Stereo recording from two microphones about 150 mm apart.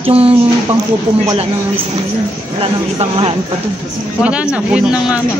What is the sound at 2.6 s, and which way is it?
Speech, 35° right (ahead or behind).